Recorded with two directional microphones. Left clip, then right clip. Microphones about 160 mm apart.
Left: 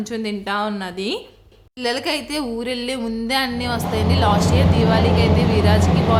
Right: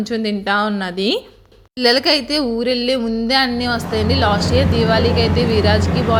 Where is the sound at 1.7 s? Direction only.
30° right (ahead or behind).